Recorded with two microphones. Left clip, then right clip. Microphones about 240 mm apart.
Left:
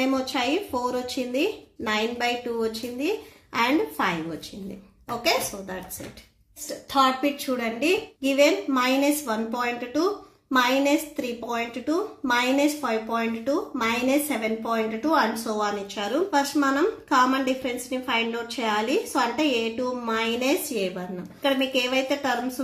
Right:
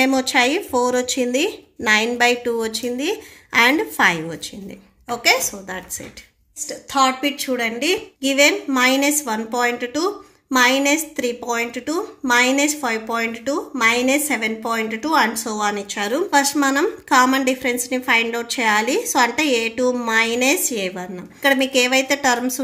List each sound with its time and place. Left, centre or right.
0.0 s a woman's voice: right
6.9 s a woman's voice: right